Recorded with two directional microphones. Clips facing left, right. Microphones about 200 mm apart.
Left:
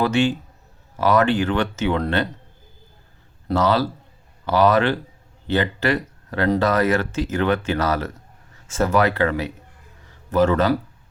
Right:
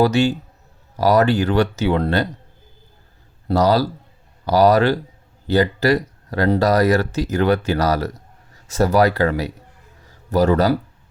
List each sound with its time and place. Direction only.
0.0 s speech: 40° right (ahead or behind)
3.5 s a man's voice: 40° right (ahead or behind)